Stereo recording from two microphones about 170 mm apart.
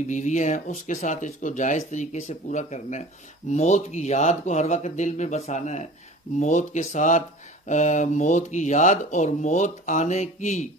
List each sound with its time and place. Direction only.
0.1 s speech: 45° left (ahead or behind)